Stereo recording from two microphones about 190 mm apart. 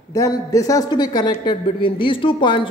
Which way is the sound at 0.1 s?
15° left (ahead or behind).